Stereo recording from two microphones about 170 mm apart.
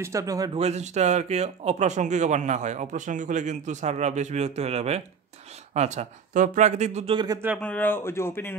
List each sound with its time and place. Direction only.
0.0 s speech: 20° right (ahead or behind)
0.6 s speech: 40° right (ahead or behind)
7.6 s speech: 10° left (ahead or behind)